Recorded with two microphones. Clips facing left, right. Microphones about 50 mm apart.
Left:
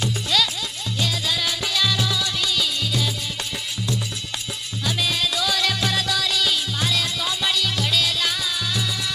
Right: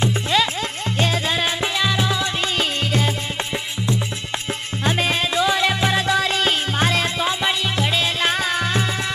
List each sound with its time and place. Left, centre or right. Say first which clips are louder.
0.0 s music: right 4 dB; right
4.8 s music: right 4 dB; right